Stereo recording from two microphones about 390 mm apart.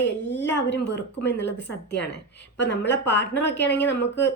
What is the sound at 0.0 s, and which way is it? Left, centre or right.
Speech, left.